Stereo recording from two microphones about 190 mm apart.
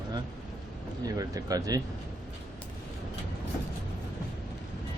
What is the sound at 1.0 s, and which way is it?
Speech, 20° right (ahead or behind).